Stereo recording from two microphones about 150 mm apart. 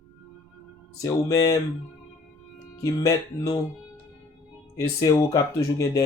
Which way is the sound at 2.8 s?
25° left (ahead or behind).